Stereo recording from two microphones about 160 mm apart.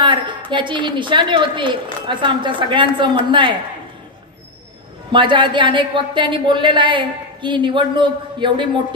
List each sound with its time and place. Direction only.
0.0 s a sound: 30° right (ahead or behind)
0.5 s speech: 30° right (ahead or behind)
5.1 s speech: 30° right (ahead or behind)